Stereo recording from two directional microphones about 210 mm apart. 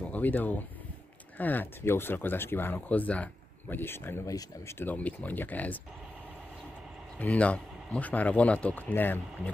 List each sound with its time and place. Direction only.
0.0 s speech: 5° left (ahead or behind)
7.2 s speech: 5° left (ahead or behind)